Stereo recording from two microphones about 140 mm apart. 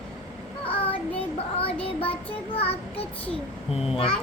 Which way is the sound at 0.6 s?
40° left (ahead or behind).